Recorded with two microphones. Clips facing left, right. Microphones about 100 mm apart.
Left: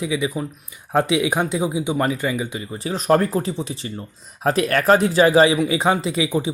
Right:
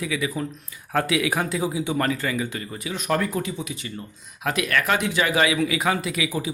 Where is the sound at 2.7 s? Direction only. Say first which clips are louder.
Left 7 dB; 35° left (ahead or behind).